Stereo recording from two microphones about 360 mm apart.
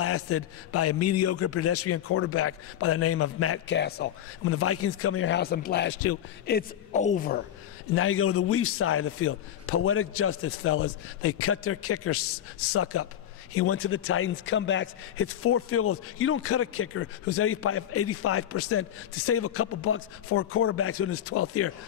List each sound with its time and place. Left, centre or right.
0.0 s a man's voice: left
6.4 s a woman's voice: left
7.9 s a man's voice: left